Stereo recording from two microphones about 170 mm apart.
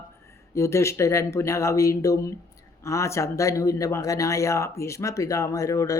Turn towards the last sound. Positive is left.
turn(degrees=20)  # may be behind; listen again after turning